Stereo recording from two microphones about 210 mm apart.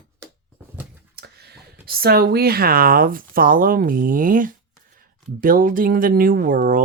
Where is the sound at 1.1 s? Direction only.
50° right (ahead or behind).